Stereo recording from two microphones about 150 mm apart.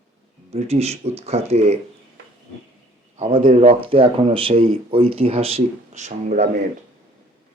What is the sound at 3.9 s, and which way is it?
Speech, 35° right (ahead or behind).